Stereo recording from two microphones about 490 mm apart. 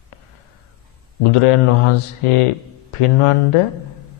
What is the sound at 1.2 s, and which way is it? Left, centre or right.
A man's voice, left.